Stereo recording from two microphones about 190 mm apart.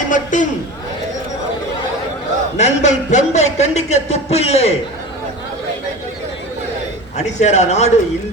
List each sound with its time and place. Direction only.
0.1 s a sound: 40° left (ahead or behind)
2.6 s speech: 35° left (ahead or behind)
7.2 s speech: 35° left (ahead or behind)